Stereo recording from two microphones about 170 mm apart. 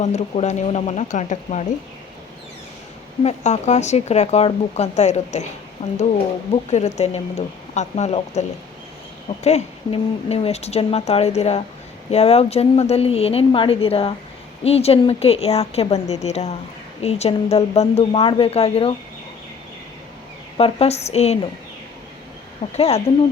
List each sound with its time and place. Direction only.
0.0 s speech: 40° left (ahead or behind)
3.2 s speech: 40° left (ahead or behind)
20.6 s speech: 35° left (ahead or behind)
22.7 s speech: 40° left (ahead or behind)